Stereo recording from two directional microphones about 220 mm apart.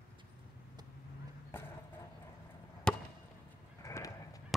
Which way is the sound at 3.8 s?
15° left (ahead or behind).